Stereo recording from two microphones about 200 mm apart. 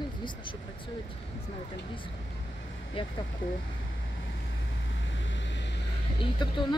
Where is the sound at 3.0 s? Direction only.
25° left (ahead or behind).